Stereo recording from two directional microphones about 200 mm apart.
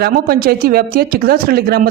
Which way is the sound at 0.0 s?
50° right (ahead or behind).